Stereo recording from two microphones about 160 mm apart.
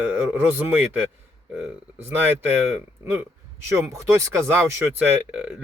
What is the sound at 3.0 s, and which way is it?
Speech, 15° right (ahead or behind).